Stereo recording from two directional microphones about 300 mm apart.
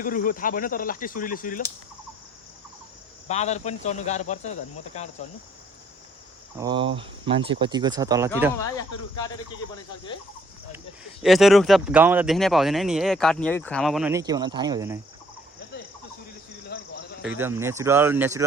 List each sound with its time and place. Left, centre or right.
0.0 s speech: left
3.2 s speech: left
6.6 s speech: centre
8.5 s speech: centre
11.2 s speech: centre
16.6 s a sound: left
17.2 s speech: centre